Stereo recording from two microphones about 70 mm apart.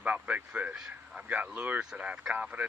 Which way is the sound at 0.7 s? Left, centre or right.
Centre.